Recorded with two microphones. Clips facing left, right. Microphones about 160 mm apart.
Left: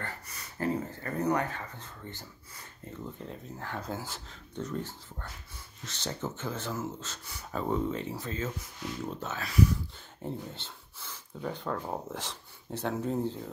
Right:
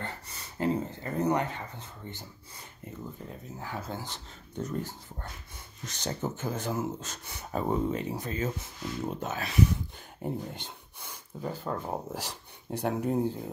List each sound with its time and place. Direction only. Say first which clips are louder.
0.0 s speech: right 2 dB; 20° right (ahead or behind)
3.2 s speech: even; 5° right (ahead or behind)
4.6 s speech: right 2 dB; 10° right (ahead or behind)